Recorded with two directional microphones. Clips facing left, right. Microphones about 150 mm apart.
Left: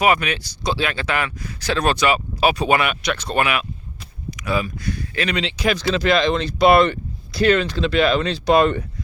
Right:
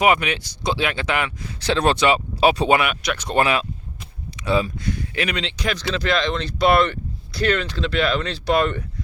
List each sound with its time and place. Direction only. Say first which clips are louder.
0.0 s speech: even; 20° right (ahead or behind)
2.7 s speech: even; 5° right (ahead or behind)
3.2 s speech: right 3 dB; 20° right (ahead or behind)
3.4 s speech: right 2 dB; 30° right (ahead or behind)
5.3 s speech: left 4 dB; 5° left (ahead or behind)